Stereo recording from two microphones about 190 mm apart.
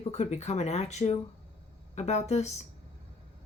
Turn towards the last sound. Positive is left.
turn(degrees=35)  # may be behind; listen again after turning